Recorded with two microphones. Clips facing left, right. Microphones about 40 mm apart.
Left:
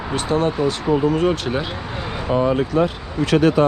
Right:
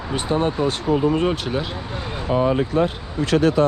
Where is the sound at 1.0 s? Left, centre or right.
Right.